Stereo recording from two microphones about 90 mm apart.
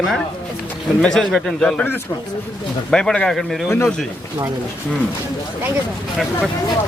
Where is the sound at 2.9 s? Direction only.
10° left (ahead or behind).